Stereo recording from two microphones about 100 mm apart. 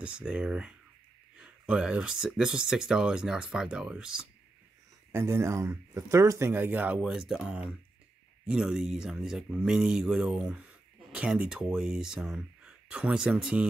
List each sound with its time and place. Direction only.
0.0 s speech: 10° right (ahead or behind)
5.1 s speech: 25° right (ahead or behind); by 13.7 s 5° right (ahead or behind)